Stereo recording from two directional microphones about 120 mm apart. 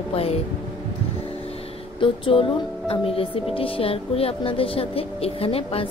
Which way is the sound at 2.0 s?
45° left (ahead or behind).